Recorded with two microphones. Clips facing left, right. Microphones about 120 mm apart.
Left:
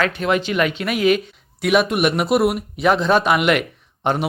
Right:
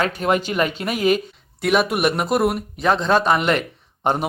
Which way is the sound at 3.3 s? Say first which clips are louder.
Left 1 dB; 35° right (ahead or behind).